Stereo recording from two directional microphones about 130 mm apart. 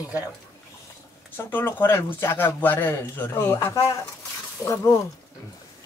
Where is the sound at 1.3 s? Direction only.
15° left (ahead or behind).